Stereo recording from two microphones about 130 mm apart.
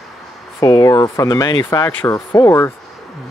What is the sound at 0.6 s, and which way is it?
Speech, 25° left (ahead or behind).